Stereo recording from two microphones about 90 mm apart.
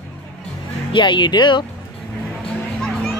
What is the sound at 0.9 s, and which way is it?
Speech, 60° left (ahead or behind).